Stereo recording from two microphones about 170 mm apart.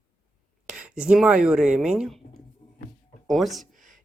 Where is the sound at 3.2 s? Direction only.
Centre (ahead or behind).